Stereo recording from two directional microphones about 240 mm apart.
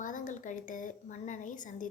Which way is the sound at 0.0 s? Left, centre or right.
Left.